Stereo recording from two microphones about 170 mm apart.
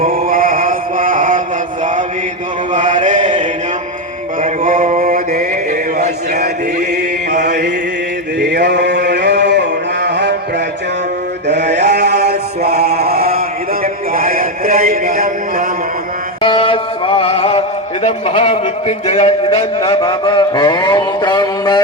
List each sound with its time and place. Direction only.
0.0 s music: 55° right (ahead or behind)
2.7 s mantra: 50° right (ahead or behind)
4.6 s mantra: 55° right (ahead or behind)
6.4 s chant: 75° right (ahead or behind)
8.4 s a sound: 70° right (ahead or behind); by 10.3 s 90° right
11.4 s mantra: 85° right
12.8 s chant: 65° right (ahead or behind)
13.8 s a sound: 60° right (ahead or behind)
16.4 s music: 30° left (ahead or behind)
18.0 s a man's voice: 35° left (ahead or behind)